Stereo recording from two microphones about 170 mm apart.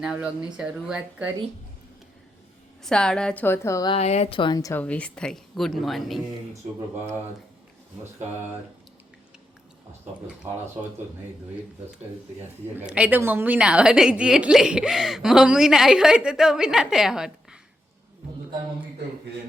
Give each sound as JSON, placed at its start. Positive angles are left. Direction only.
{"t": 0.0, "sound": "a woman's voice", "side_deg": -5}
{"t": 2.8, "sound": "a woman's voice", "side_deg": 5}
{"t": 3.9, "sound": "speech", "side_deg": 40}
{"t": 4.8, "sound": "a woman's voice", "side_deg": 10}
{"t": 6.5, "sound": "speech", "side_deg": -15}
{"t": 10.4, "sound": "speech", "side_deg": -15}
{"t": 12.7, "sound": "a woman's voice", "side_deg": -5}